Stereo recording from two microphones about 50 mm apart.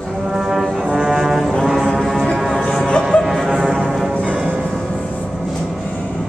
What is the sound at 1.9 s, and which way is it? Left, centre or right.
Foghorn, centre.